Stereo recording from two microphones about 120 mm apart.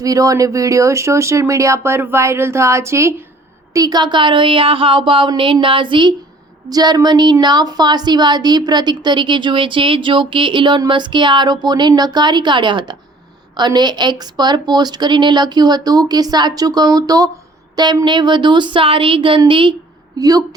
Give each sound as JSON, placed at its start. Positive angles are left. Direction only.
{"t": 0.0, "sound": "a woman's voice", "side_deg": -30}
{"t": 20.1, "sound": "a woman's voice", "side_deg": -30}